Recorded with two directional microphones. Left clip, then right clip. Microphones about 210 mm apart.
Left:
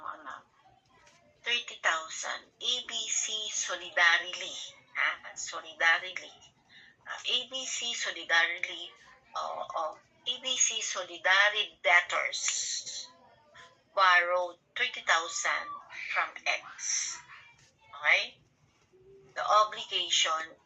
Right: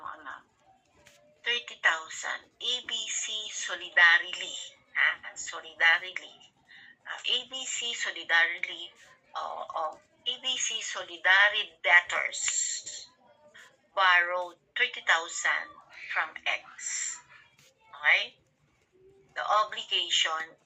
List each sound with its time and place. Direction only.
0.0 s bird: 30° right (ahead or behind)
1.5 s a woman's voice: 25° right (ahead or behind)
14.0 s a woman's voice: 25° right (ahead or behind)
18.0 s a woman's voice: 25° right (ahead or behind)
19.3 s a woman's voice: 25° right (ahead or behind)